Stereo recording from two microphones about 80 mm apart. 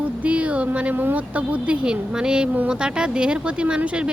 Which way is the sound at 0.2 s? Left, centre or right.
Centre.